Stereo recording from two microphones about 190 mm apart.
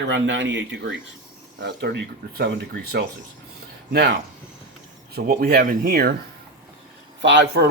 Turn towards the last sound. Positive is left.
turn(degrees=-65)  # may be behind; listen again after turning